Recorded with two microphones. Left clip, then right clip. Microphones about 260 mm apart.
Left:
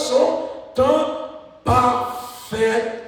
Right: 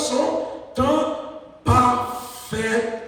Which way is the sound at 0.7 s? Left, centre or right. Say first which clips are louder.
Left 4 dB; left.